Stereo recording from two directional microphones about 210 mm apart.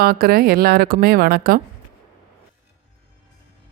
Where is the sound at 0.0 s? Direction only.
45° right (ahead or behind).